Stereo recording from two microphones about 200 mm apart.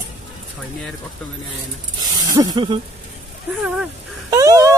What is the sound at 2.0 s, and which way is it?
Speech, 20° right (ahead or behind).